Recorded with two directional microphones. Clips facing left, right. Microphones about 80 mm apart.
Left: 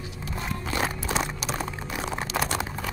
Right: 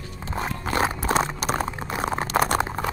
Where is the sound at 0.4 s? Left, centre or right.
Right.